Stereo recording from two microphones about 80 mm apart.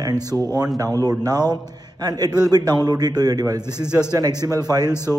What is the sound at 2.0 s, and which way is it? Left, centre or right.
Speech, right.